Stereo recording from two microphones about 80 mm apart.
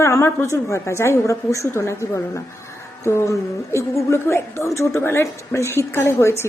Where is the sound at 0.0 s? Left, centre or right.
Left.